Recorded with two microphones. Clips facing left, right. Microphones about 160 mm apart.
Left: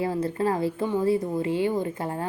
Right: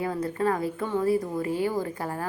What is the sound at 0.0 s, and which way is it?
A woman's voice, 30° left (ahead or behind).